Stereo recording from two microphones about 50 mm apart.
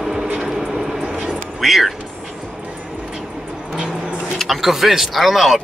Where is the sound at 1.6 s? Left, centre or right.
Centre.